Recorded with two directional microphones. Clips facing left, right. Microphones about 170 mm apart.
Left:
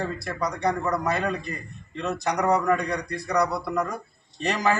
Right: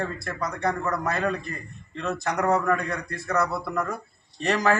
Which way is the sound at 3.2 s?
15° left (ahead or behind).